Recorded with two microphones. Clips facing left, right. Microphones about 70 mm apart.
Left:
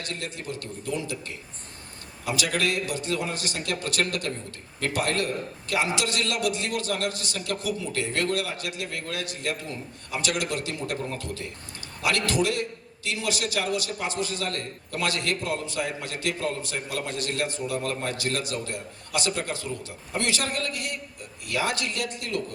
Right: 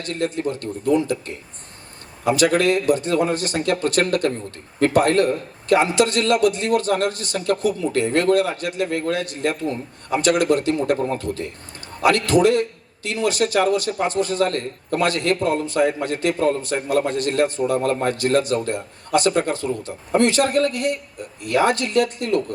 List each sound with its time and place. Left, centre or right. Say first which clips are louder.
0.0 s a man's voice: right 11 dB; right